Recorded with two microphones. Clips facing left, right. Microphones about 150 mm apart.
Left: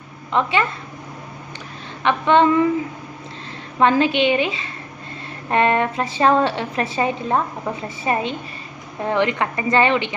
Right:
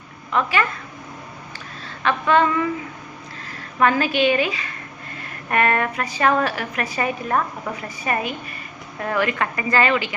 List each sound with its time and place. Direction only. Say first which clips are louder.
0.3 s a woman's voice: left 2 dB; 25° left (ahead or behind)
2.0 s a woman's voice: left 3 dB; 25° left (ahead or behind)
3.8 s a woman's voice: left 2 dB; 25° left (ahead or behind)